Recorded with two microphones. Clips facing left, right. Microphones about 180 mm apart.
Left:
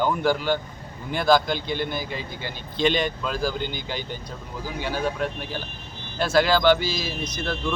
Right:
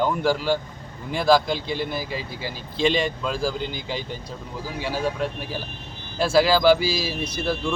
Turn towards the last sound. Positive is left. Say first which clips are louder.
# right 3 dB
turn(degrees=-10)  # may be behind; listen again after turning